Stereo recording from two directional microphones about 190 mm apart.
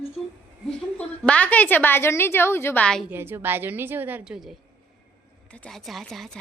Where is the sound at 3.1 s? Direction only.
10° right (ahead or behind).